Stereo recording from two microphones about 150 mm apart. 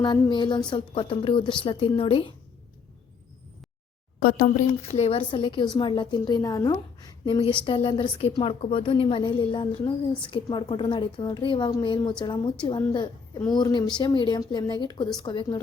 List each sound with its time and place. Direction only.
0.0 s a woman's voice: 30° left (ahead or behind)
4.2 s speech: 75° left (ahead or behind)
4.8 s a woman's voice: 45° left (ahead or behind); by 15.5 s 30° left (ahead or behind)